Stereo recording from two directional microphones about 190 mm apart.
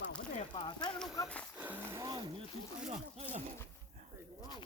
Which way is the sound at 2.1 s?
25° right (ahead or behind).